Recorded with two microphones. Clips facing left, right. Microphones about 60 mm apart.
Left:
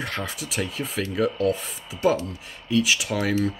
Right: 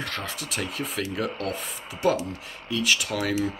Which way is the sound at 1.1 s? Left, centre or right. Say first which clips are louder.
Left 10 dB; centre.